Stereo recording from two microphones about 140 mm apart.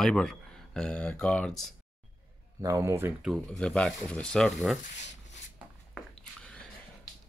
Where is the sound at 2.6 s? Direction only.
20° right (ahead or behind).